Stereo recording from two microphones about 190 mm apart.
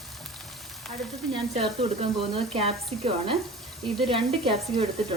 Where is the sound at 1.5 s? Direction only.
30° right (ahead or behind).